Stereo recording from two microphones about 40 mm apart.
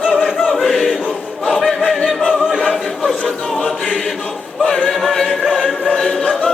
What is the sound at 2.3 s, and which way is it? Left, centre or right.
Choir, centre.